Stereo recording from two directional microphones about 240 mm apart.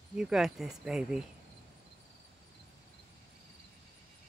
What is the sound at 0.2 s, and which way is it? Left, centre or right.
Speech, centre.